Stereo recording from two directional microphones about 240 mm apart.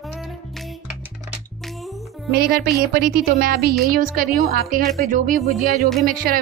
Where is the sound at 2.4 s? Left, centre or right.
Right.